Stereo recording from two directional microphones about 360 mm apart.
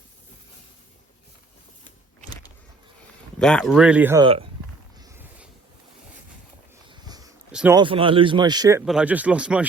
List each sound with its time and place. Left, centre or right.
3.3 s speech: centre
4.9 s a sound: centre
6.9 s speech: centre